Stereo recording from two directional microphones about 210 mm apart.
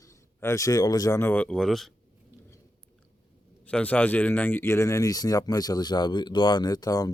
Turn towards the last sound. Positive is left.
turn(degrees=20)  # may be behind; listen again after turning